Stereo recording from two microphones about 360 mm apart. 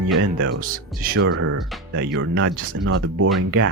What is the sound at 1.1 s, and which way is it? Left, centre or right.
Speech, right.